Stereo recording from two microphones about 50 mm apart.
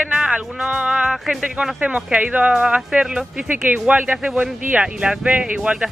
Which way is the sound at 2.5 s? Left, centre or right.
Centre.